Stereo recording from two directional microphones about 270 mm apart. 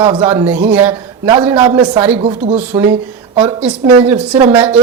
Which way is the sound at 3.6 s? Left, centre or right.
Centre.